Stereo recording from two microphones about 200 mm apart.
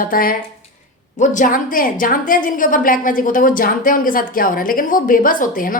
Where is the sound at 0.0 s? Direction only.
45° left (ahead or behind).